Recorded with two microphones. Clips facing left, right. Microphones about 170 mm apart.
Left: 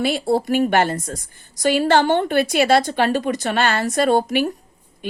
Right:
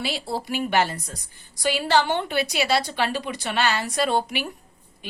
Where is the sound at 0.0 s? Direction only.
55° left (ahead or behind).